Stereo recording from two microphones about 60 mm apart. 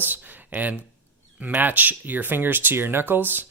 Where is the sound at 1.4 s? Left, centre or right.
Right.